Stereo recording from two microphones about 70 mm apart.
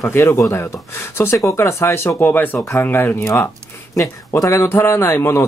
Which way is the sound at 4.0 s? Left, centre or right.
Left.